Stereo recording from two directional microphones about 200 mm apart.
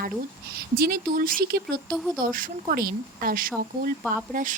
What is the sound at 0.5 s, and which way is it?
Speech, 50° right (ahead or behind).